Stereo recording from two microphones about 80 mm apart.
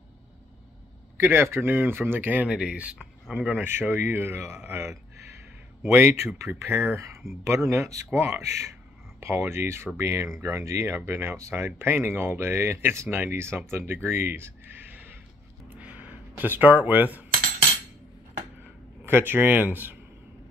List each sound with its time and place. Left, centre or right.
1.2 s speech: right
15.7 s a sound: centre
19.0 s speech: right